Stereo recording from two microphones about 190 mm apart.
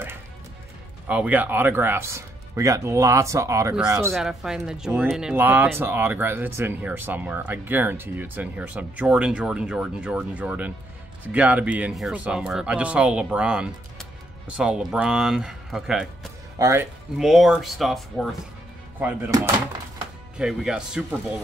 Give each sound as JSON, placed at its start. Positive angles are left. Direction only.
{"t": 1.0, "sound": "speech", "side_deg": -10}
{"t": 4.1, "sound": "speech", "side_deg": 0}
{"t": 16.5, "sound": "speech", "side_deg": -15}
{"t": 17.2, "sound": "speech", "side_deg": 0}
{"t": 18.9, "sound": "speech", "side_deg": -10}